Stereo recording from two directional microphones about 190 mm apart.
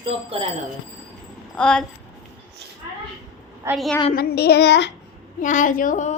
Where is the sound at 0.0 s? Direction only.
30° right (ahead or behind).